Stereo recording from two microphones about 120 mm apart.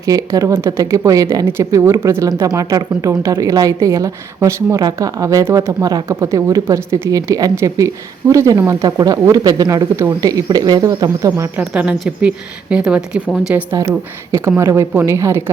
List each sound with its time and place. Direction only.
0.0 s speech: 30° right (ahead or behind)
11.7 s speech: 10° right (ahead or behind)
13.7 s speech: 30° right (ahead or behind)